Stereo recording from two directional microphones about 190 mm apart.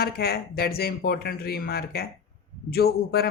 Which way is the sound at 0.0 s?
55° left (ahead or behind).